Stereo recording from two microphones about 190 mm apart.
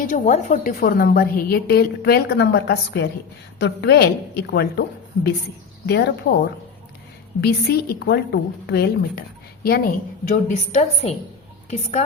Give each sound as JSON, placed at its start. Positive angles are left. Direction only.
{"t": 0.0, "sound": "a woman's voice", "side_deg": 40}